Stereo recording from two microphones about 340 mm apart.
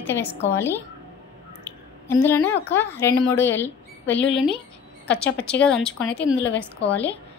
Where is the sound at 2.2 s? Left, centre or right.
Centre.